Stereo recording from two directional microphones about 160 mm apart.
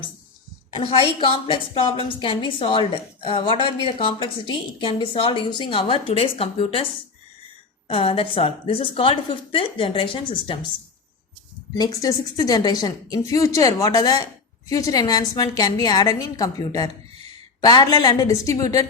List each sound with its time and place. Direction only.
0.8 s a woman's voice: 35° left (ahead or behind)
7.9 s a woman's voice: 35° left (ahead or behind)
11.7 s a woman's voice: 25° left (ahead or behind)